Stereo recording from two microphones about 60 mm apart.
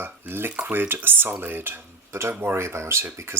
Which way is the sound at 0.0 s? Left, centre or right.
Right.